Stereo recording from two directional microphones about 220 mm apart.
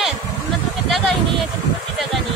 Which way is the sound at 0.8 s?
Centre (ahead or behind).